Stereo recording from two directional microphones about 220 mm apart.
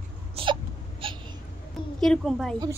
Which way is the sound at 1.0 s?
25° right (ahead or behind).